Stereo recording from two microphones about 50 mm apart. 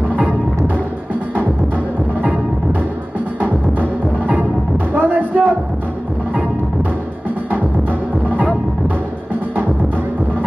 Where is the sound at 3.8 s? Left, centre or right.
Right.